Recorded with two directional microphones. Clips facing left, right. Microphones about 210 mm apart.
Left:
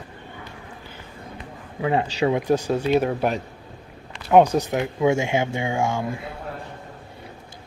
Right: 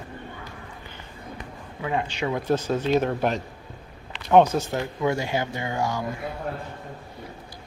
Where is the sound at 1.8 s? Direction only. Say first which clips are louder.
Left 5 dB; 30° left (ahead or behind).